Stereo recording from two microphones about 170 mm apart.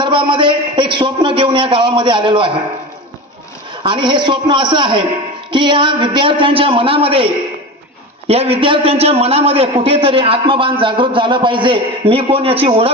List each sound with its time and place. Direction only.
0.0 s a man's voice: 30° right (ahead or behind)
3.8 s a man's voice: 30° right (ahead or behind)
8.3 s a man's voice: 35° right (ahead or behind)